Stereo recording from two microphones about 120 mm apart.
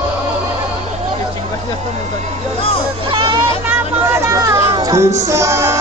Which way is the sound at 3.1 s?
40° right (ahead or behind).